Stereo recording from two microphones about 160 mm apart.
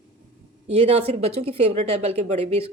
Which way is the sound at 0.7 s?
40° right (ahead or behind).